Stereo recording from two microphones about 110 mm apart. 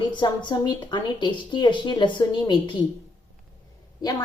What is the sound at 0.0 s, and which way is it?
A woman's voice, 45° left (ahead or behind).